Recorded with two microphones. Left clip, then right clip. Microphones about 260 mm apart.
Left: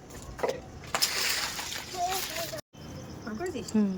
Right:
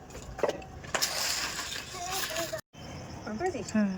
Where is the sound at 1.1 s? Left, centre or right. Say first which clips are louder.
Left 2 dB; centre.